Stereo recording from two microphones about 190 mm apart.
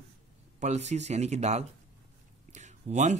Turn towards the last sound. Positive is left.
turn(degrees=-35)  # may be behind; listen again after turning